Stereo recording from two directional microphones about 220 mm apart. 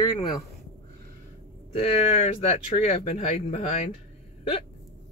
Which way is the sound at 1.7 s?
30° left (ahead or behind).